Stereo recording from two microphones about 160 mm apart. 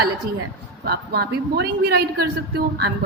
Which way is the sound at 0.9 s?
85° right.